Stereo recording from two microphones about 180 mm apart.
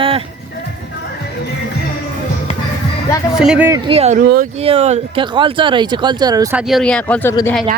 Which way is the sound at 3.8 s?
35° right (ahead or behind).